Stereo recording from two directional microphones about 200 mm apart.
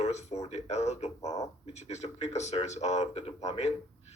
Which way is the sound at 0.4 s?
35° left (ahead or behind).